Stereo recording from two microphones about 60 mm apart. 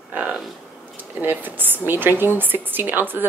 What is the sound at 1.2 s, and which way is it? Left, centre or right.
A woman's voice, right.